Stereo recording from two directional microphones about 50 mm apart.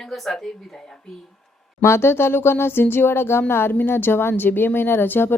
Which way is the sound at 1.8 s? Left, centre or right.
Left.